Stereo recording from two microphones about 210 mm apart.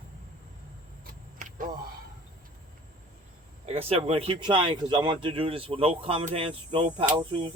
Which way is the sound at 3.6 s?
30° right (ahead or behind).